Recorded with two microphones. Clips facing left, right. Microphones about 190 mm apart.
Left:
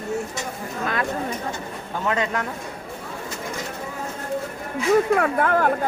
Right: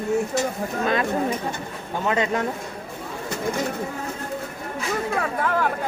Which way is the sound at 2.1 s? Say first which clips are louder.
Right 2 dB; 20° right (ahead or behind).